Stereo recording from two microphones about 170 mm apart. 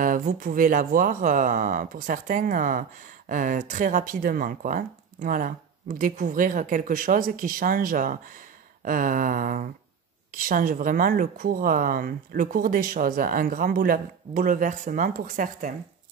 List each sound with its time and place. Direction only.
0.0 s speech: 55° right (ahead or behind)